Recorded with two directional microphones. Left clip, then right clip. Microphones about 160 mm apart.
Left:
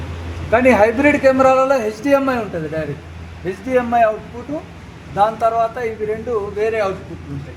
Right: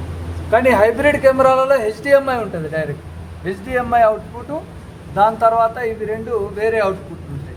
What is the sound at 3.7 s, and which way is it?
Speech, 30° left (ahead or behind).